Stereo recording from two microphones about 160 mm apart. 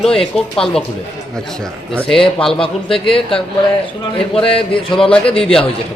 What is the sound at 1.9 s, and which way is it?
A man's voice, 5° left (ahead or behind).